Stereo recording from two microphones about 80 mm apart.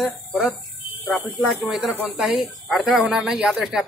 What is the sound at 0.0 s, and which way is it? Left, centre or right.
Speech, centre.